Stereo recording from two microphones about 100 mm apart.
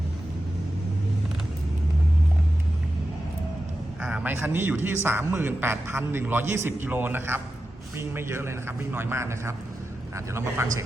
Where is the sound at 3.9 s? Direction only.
10° right (ahead or behind).